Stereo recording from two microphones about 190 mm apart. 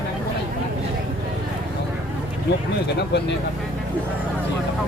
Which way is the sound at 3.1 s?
60° left (ahead or behind).